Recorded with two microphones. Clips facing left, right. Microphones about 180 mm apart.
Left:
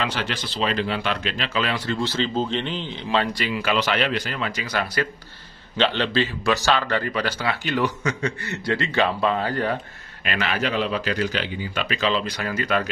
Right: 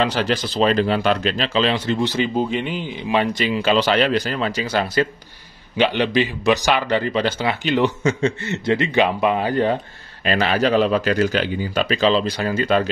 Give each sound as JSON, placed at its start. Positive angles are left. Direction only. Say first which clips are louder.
{"t": 0.0, "sound": "speech", "louder": "right 7 dB", "side_deg": -40}
{"t": 5.8, "sound": "speech", "louder": "right 4 dB", "side_deg": -15}
{"t": 10.2, "sound": "speech", "louder": "right 7 dB", "side_deg": -35}